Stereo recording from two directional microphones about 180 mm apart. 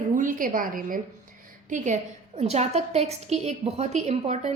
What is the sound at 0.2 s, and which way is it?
A woman's voice, 50° right (ahead or behind).